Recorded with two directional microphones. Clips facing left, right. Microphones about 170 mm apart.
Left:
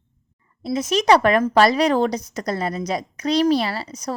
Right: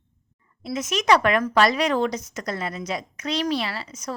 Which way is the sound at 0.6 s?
30° left (ahead or behind).